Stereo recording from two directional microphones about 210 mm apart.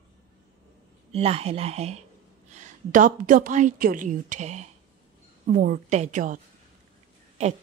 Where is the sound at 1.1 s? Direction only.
30° right (ahead or behind).